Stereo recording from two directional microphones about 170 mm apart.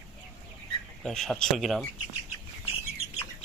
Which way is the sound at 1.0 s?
Centre (ahead or behind).